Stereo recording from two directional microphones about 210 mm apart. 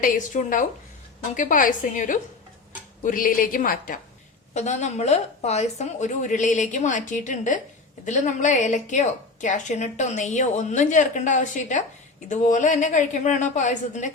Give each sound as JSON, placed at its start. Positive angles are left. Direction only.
{"t": 0.0, "sound": "a woman's voice", "side_deg": 40}